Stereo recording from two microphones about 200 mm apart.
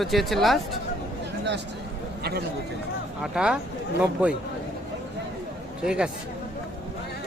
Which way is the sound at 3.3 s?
5° right (ahead or behind).